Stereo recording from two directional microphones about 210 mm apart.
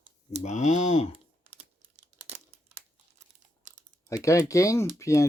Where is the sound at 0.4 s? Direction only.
35° left (ahead or behind).